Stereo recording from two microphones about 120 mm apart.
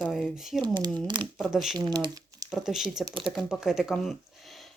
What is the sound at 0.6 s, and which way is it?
Speech, 40° right (ahead or behind).